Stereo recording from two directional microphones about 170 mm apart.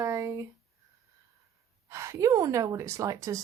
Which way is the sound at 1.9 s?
15° right (ahead or behind).